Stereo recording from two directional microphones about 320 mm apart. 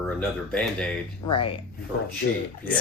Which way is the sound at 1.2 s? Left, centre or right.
Centre.